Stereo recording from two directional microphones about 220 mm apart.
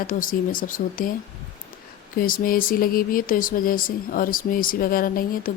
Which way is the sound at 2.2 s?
40° left (ahead or behind).